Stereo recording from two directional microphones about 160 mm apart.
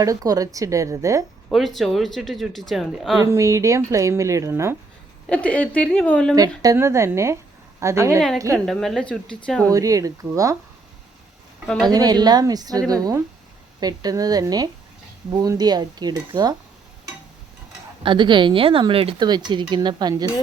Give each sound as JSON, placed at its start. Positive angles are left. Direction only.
{"t": 0.0, "sound": "speech", "side_deg": -20}
{"t": 1.5, "sound": "speech", "side_deg": 0}
{"t": 3.3, "sound": "speech", "side_deg": -20}
{"t": 5.3, "sound": "a woman's voice", "side_deg": 10}
{"t": 6.6, "sound": "a woman's voice", "side_deg": -20}
{"t": 8.5, "sound": "speech", "side_deg": 0}
{"t": 9.6, "sound": "speech", "side_deg": -20}
{"t": 11.8, "sound": "speech", "side_deg": -25}
{"t": 18.0, "sound": "speech", "side_deg": -30}